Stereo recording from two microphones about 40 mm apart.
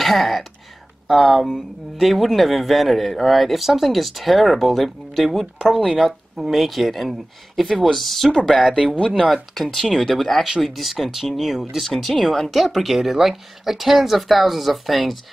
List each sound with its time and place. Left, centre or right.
0.0 s speech: centre
11.8 s speech: centre